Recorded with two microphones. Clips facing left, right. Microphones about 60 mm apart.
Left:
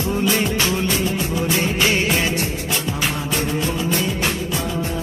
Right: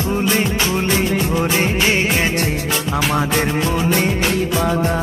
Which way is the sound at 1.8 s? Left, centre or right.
Right.